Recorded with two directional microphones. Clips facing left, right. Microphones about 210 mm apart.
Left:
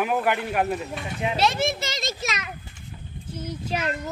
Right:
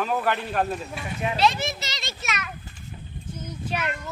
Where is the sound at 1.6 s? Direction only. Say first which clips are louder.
Left 5 dB; 50° left (ahead or behind); by 2.5 s 35° left (ahead or behind).